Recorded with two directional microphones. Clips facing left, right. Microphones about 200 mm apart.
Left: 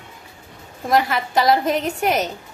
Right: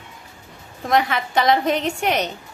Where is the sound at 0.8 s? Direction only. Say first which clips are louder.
Left 1 dB; centre (ahead or behind).